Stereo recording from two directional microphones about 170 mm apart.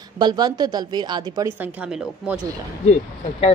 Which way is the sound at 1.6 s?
5° right (ahead or behind).